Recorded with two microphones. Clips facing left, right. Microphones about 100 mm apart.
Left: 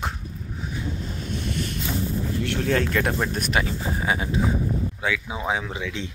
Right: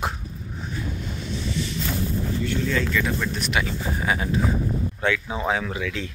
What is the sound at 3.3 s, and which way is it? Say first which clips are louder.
Speech: left 1 dB; 45° left (ahead or behind).